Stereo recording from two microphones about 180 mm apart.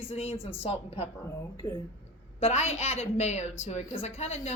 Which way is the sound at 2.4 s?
35° left (ahead or behind).